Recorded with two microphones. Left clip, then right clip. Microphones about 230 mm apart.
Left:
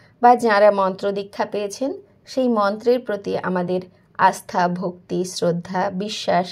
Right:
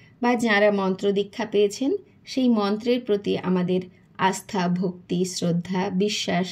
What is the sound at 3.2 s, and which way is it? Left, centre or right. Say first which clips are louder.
A woman's voice: left 3 dB; centre.